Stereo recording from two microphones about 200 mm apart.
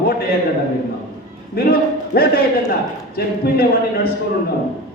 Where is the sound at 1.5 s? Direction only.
50° left (ahead or behind).